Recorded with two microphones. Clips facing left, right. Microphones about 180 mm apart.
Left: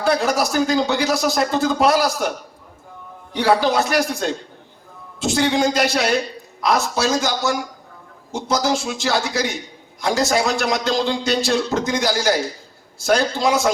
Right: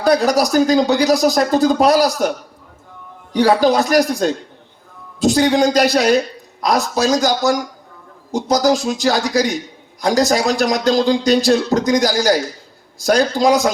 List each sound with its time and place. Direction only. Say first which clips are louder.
0.0 s a man's voice: right 5 dB; 40° right (ahead or behind)
3.3 s a man's voice: right 4 dB; 40° right (ahead or behind)